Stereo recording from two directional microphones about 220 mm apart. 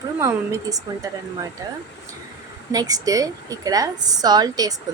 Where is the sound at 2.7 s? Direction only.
15° right (ahead or behind).